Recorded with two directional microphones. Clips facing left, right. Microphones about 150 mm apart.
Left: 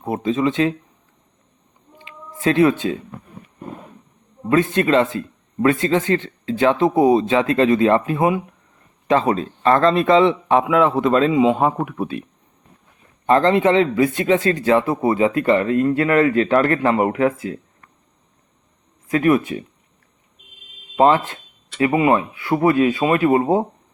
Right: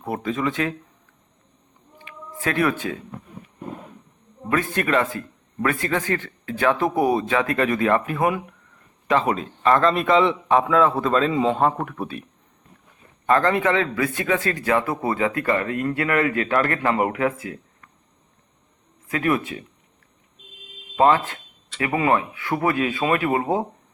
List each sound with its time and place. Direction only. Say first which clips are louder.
0.0 s speech: left 5 dB; 20° left (ahead or behind)
2.0 s a sound: even; 25° left (ahead or behind)
4.4 s speech: left 6 dB; 25° left (ahead or behind)
10.6 s speech: left 3 dB; 15° left (ahead or behind)
13.2 s speech: left 4 dB; 25° left (ahead or behind)
19.1 s speech: left 6 dB; 30° left (ahead or behind)
20.9 s speech: left 3 dB; 25° left (ahead or behind)